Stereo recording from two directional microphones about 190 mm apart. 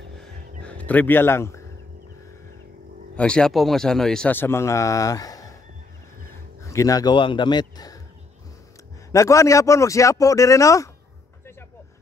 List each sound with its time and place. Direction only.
0.2 s a sound: 5° left (ahead or behind)
3.2 s speech: 5° left (ahead or behind); by 8.0 s 20° left (ahead or behind)
9.1 s speech: 15° left (ahead or behind)